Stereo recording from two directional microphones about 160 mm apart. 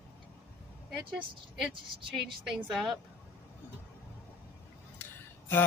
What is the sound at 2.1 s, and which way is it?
Speech, centre (ahead or behind).